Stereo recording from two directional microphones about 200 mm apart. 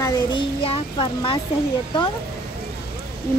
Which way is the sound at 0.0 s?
20° left (ahead or behind).